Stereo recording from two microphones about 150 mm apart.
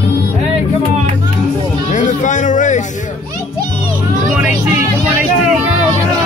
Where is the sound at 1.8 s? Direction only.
55° left (ahead or behind).